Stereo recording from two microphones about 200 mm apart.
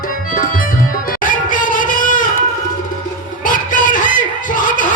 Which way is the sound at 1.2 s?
40° left (ahead or behind).